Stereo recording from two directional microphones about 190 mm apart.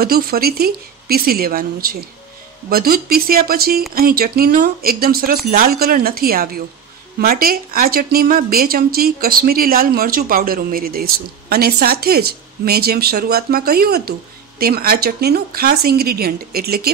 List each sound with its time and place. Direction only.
0.0 s speech: 50° right (ahead or behind)